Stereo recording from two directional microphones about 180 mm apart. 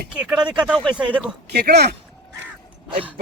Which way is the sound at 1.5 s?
65° right (ahead or behind).